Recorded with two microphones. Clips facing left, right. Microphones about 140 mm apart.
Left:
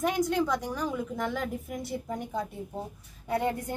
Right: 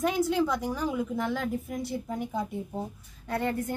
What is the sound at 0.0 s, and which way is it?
A woman's voice, centre (ahead or behind).